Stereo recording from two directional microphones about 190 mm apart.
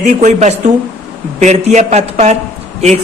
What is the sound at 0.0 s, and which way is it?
A woman's voice, 40° right (ahead or behind).